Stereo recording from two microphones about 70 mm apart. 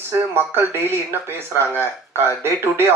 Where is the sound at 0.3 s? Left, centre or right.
Right.